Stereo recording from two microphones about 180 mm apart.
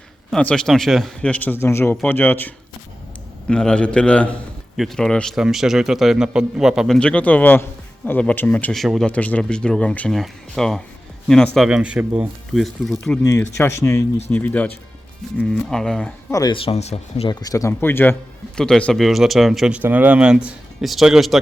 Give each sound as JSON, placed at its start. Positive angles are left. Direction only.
{"t": 0.3, "sound": "speech", "side_deg": 5}
{"t": 3.5, "sound": "a man's voice", "side_deg": 5}
{"t": 13.4, "sound": "a man's voice", "side_deg": 15}
{"t": 16.3, "sound": "speech", "side_deg": 25}
{"t": 17.4, "sound": "a man's voice", "side_deg": 20}